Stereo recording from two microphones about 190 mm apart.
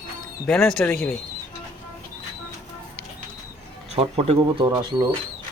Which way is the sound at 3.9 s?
30° right (ahead or behind).